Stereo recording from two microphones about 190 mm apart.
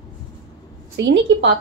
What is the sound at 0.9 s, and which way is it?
Speech, 70° right (ahead or behind).